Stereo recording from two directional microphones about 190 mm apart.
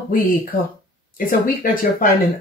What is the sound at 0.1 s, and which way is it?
Speech, 50° left (ahead or behind).